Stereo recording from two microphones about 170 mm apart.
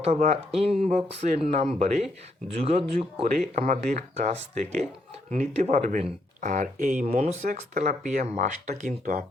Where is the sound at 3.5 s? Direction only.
45° right (ahead or behind).